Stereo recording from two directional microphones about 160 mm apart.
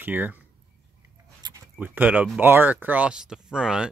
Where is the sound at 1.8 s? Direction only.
10° right (ahead or behind).